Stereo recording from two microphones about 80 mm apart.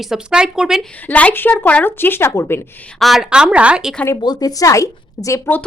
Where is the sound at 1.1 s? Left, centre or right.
Left.